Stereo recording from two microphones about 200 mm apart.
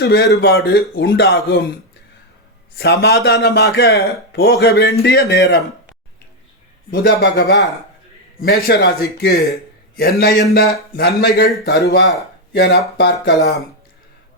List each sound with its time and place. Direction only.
0.0 s a man's voice: 55° left (ahead or behind)
2.7 s a man's voice: 55° left (ahead or behind)
6.9 s a man's voice: 50° left (ahead or behind)